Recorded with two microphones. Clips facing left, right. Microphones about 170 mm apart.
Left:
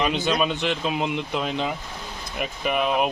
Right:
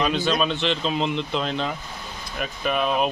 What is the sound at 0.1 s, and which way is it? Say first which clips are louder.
A man's voice: even; 15° left (ahead or behind).